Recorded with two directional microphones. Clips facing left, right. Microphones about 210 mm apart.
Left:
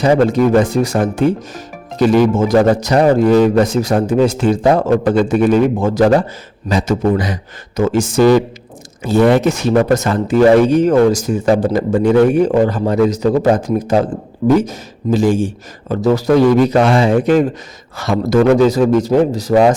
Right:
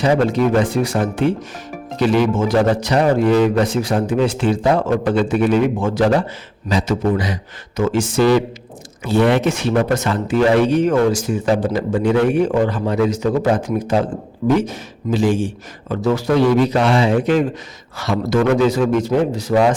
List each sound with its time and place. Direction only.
0.0 s a man's voice: 45° left (ahead or behind)